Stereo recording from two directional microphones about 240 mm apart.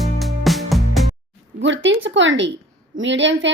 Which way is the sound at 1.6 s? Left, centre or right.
Right.